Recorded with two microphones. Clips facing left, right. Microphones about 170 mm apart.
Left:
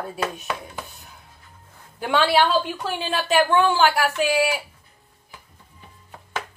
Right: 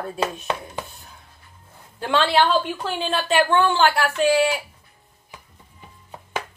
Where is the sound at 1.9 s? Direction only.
5° left (ahead or behind).